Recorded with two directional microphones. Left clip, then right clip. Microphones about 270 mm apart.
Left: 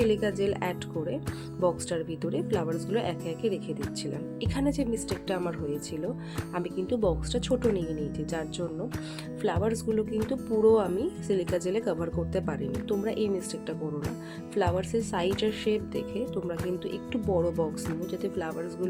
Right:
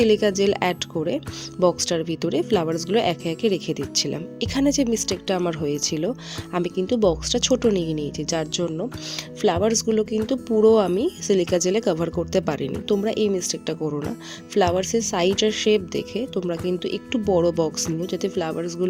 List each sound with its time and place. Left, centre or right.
0.0 s speech: right